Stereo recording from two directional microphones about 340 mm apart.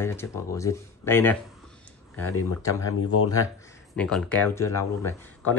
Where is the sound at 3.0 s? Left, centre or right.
Left.